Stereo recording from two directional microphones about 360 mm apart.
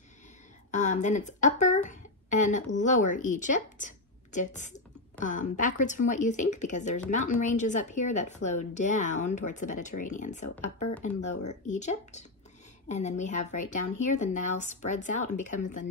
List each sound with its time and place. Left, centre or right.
0.7 s a woman's voice: centre